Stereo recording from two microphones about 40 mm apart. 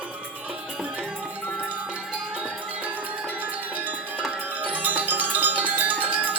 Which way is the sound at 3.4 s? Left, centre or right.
Right.